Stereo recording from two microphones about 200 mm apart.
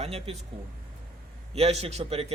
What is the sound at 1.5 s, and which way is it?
Speech, 30° right (ahead or behind).